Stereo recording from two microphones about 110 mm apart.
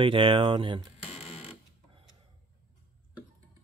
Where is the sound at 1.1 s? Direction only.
65° left (ahead or behind).